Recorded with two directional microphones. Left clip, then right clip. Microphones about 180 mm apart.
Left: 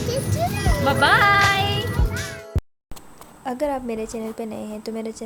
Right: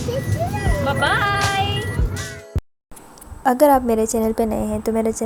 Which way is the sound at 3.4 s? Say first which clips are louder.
Right 11 dB; 25° right (ahead or behind).